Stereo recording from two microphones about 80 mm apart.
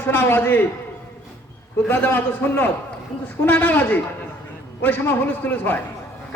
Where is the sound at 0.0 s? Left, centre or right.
Left.